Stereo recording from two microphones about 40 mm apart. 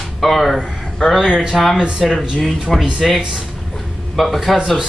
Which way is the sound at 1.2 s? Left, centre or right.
Centre.